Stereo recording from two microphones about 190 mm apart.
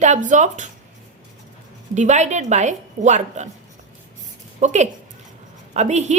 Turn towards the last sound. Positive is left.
turn(degrees=-35)  # may be behind; listen again after turning